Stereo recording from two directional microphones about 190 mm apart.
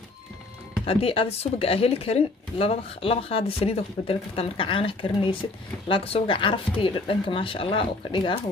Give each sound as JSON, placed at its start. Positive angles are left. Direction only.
{"t": 0.8, "sound": "speech", "side_deg": 30}